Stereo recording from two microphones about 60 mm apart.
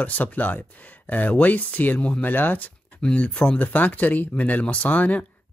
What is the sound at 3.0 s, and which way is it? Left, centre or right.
Speech, centre.